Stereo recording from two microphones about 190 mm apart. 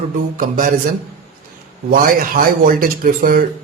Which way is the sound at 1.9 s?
50° right (ahead or behind).